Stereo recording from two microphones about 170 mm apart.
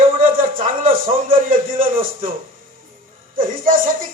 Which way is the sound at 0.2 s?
55° right (ahead or behind).